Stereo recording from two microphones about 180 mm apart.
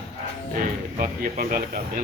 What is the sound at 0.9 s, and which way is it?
Speech, 50° right (ahead or behind).